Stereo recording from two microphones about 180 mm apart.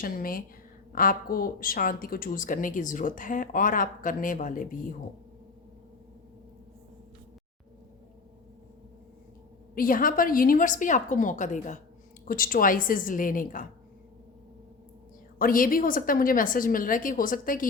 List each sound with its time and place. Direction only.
0.0 s a woman's voice: 50° left (ahead or behind)
9.7 s a woman's voice: 50° left (ahead or behind)
15.4 s a woman's voice: 50° left (ahead or behind)